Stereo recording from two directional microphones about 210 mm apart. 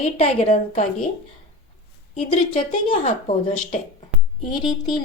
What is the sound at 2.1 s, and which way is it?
Speech, 25° left (ahead or behind).